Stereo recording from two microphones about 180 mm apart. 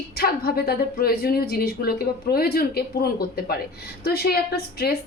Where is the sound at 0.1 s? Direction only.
60° left (ahead or behind).